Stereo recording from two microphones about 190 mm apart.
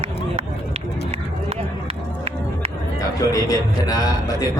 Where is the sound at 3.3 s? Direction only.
20° left (ahead or behind).